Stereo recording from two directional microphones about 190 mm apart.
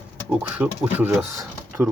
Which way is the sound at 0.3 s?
5° right (ahead or behind).